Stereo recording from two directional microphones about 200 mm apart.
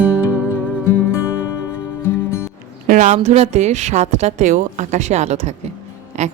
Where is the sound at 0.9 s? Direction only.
10° left (ahead or behind).